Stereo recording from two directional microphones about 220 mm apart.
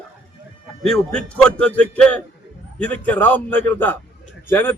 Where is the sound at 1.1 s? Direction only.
5° left (ahead or behind).